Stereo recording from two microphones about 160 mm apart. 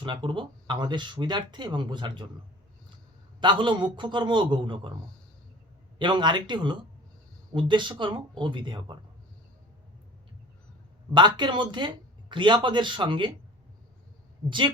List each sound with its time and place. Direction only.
0.0 s speech: 30° right (ahead or behind)
3.4 s speech: 30° right (ahead or behind)
6.0 s speech: 30° right (ahead or behind)
11.1 s speech: 30° right (ahead or behind)